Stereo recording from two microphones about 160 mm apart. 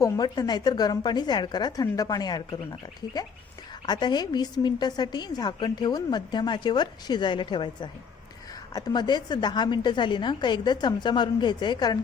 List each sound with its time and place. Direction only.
0.0 s a woman's voice: 25° left (ahead or behind)
3.8 s a woman's voice: 25° left (ahead or behind)